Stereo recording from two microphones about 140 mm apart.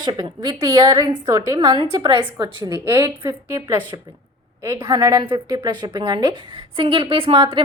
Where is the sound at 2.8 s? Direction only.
20° right (ahead or behind).